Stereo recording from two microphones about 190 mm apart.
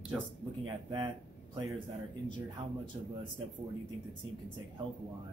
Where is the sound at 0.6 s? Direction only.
25° right (ahead or behind).